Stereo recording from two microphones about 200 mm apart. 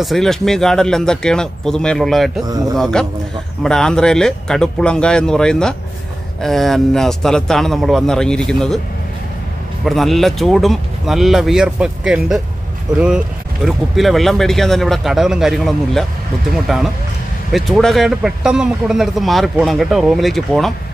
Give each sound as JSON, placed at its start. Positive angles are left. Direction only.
{"t": 0.0, "sound": "a man's voice", "side_deg": 0}
{"t": 2.4, "sound": "speech", "side_deg": -20}
{"t": 2.8, "sound": "a man's voice", "side_deg": 5}
{"t": 9.8, "sound": "a man's voice", "side_deg": 0}
{"t": 13.7, "sound": "a man's voice", "side_deg": 0}